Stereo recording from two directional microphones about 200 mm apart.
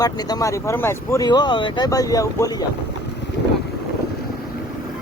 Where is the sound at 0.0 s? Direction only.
20° left (ahead or behind).